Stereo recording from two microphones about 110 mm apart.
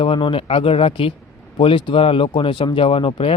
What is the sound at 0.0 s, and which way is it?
Speech, 50° left (ahead or behind).